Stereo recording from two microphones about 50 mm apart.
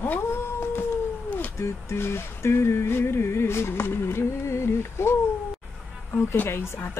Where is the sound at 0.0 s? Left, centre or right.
Left.